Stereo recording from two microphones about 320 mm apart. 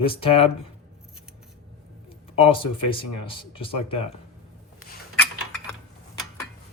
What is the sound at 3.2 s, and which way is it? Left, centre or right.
Speech, centre.